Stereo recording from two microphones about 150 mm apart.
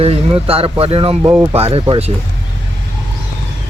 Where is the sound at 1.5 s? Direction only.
40° right (ahead or behind).